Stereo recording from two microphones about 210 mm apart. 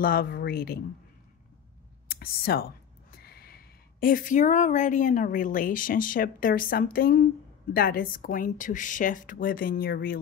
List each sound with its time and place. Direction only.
0.0 s speech: 45° left (ahead or behind)
2.0 s a woman's voice: 50° left (ahead or behind)